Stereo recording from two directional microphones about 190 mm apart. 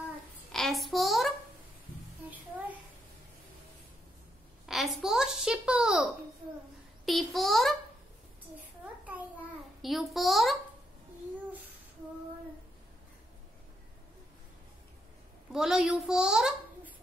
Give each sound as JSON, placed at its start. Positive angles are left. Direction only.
{"t": 0.5, "sound": "a child's voice", "side_deg": 0}
{"t": 4.6, "sound": "a child's voice", "side_deg": 0}
{"t": 7.1, "sound": "a child's voice", "side_deg": 0}
{"t": 8.5, "sound": "a sound", "side_deg": -10}
{"t": 9.8, "sound": "a child's voice", "side_deg": 0}
{"t": 15.5, "sound": "a child's voice", "side_deg": -5}